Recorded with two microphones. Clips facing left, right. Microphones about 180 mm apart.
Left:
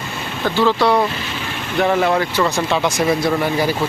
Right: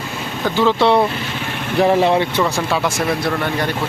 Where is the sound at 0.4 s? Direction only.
15° right (ahead or behind).